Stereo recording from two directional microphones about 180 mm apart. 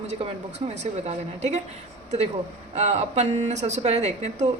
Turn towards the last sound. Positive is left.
turn(degrees=-40)  # may be behind; listen again after turning